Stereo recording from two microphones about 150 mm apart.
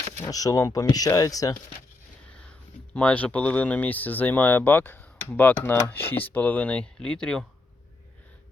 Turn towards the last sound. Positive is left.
turn(degrees=5)  # may be behind; listen again after turning